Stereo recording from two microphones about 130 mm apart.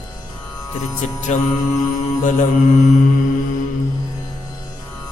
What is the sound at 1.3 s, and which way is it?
Speech, 65° left (ahead or behind).